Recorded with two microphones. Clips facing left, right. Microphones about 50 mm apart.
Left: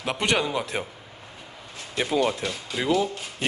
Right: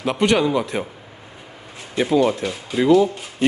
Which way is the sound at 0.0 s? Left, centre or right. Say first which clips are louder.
Right 7 dB; centre.